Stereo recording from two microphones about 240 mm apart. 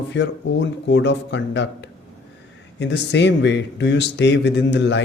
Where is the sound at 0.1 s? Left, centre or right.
Left.